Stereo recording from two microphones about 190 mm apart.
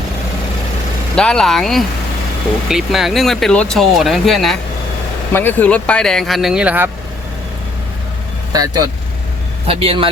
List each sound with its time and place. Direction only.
1.1 s speech: 5° left (ahead or behind)
8.5 s speech: 20° right (ahead or behind)